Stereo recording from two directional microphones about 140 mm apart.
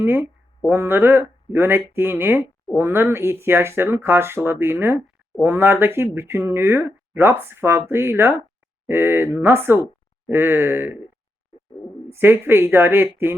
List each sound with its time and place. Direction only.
0.0 s speech: 15° right (ahead or behind)
12.1 s speech: 15° right (ahead or behind)